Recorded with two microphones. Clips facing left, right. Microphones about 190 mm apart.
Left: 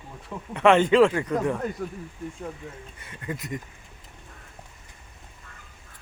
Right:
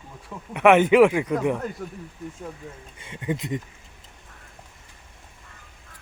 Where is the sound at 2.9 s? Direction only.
20° right (ahead or behind).